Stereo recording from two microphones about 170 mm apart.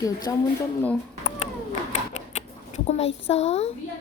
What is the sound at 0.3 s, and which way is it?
Speech, 20° left (ahead or behind).